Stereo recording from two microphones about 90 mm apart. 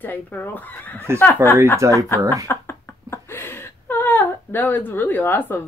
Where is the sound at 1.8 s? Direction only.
35° right (ahead or behind).